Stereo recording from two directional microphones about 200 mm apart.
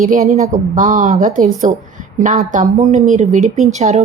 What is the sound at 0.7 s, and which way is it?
Speech, 40° right (ahead or behind).